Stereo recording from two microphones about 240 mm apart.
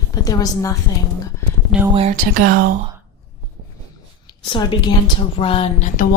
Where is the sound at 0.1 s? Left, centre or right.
Centre.